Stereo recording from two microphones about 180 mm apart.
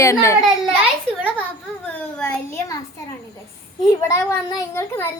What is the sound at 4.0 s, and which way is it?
A child's voice, 15° left (ahead or behind).